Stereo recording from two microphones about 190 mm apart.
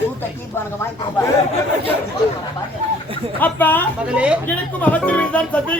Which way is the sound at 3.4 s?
10° left (ahead or behind).